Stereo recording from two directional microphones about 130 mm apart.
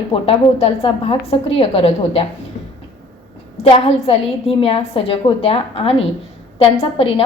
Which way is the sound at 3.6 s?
50° left (ahead or behind).